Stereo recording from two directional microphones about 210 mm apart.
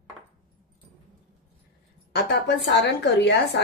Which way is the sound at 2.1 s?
55° left (ahead or behind).